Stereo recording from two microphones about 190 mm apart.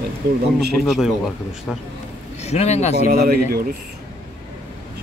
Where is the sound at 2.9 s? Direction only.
55° right (ahead or behind).